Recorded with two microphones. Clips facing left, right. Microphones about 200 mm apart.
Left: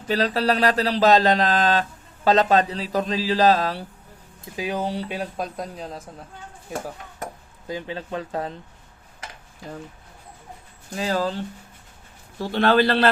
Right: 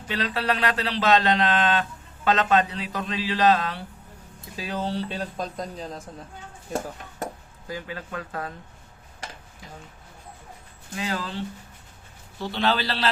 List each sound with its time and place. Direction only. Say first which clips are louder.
0.1 s speech: left 5 dB; 40° left (ahead or behind)
4.5 s speech: left 3 dB; 15° left (ahead or behind)
7.7 s speech: left 4 dB; 25° left (ahead or behind)
10.9 s speech: left 6 dB; 40° left (ahead or behind)
12.5 s a man's voice: left 7 dB; 55° left (ahead or behind)